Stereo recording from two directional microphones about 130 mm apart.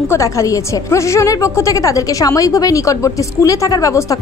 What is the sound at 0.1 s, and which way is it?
A woman's voice, 25° left (ahead or behind).